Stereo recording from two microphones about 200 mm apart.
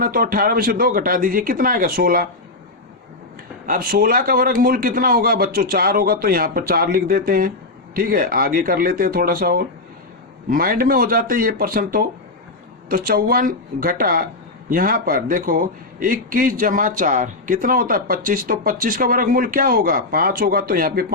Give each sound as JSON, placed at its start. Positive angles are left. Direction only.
{"t": 0.0, "sound": "a man's voice", "side_deg": -45}
{"t": 3.7, "sound": "a man's voice", "side_deg": -45}